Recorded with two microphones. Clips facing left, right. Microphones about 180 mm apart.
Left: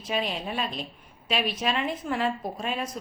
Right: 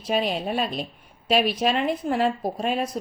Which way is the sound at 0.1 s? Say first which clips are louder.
Right 5 dB; 40° right (ahead or behind).